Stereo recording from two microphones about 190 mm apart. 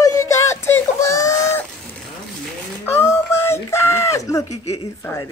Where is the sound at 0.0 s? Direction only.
15° left (ahead or behind).